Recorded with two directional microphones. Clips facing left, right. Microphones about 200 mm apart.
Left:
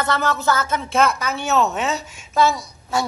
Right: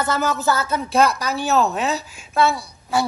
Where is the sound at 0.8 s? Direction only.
35° right (ahead or behind).